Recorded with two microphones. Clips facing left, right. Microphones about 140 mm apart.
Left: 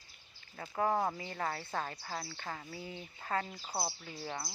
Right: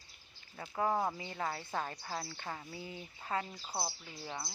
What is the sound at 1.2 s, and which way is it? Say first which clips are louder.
Speech: left 1 dB; 20° right (ahead or behind).